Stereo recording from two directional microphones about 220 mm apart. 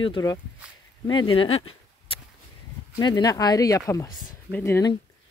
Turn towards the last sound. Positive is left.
turn(degrees=10)  # may be behind; listen again after turning